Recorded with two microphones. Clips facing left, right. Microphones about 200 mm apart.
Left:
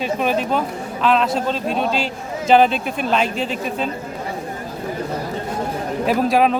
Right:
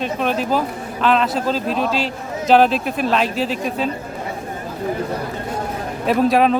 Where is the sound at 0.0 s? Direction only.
5° left (ahead or behind).